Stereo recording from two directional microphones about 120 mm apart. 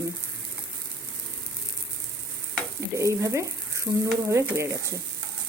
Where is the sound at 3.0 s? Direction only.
25° right (ahead or behind).